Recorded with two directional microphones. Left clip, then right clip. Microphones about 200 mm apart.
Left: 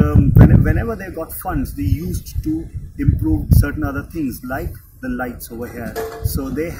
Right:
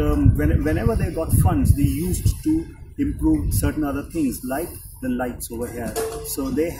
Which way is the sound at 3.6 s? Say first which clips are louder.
Left 1 dB; centre (ahead or behind).